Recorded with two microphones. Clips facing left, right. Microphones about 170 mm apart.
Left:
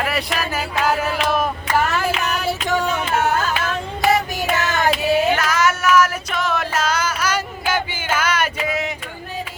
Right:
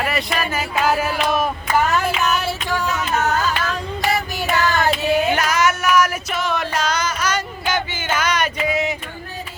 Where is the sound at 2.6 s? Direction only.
25° left (ahead or behind).